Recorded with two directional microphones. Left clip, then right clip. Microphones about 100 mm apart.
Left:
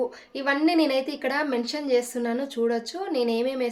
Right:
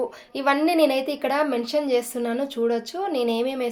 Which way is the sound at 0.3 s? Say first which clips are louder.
Right 3 dB; 25° right (ahead or behind).